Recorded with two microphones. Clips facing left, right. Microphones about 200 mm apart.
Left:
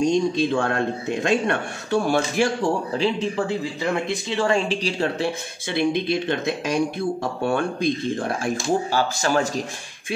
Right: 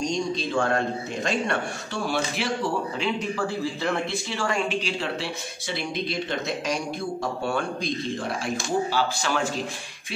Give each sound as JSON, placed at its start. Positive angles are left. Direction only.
{"t": 0.0, "sound": "a sound", "side_deg": 55}
{"t": 1.5, "sound": "speech", "side_deg": 50}
{"t": 3.0, "sound": "speech", "side_deg": 25}